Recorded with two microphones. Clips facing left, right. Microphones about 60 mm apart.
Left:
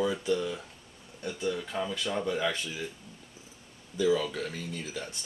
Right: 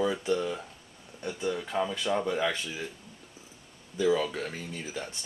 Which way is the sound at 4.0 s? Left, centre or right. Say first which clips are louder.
Right 1 dB; right.